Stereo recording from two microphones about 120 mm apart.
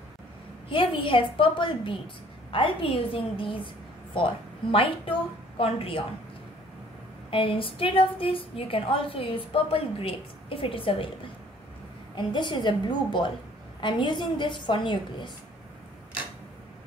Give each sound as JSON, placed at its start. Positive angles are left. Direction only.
{"t": 0.7, "sound": "a woman's voice", "side_deg": 45}
{"t": 7.2, "sound": "a woman's voice", "side_deg": 50}
{"t": 12.2, "sound": "a woman's voice", "side_deg": 40}